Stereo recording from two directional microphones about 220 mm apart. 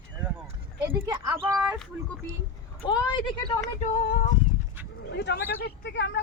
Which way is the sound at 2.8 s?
20° left (ahead or behind).